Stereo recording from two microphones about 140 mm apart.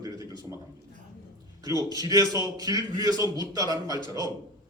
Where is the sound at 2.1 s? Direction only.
25° right (ahead or behind).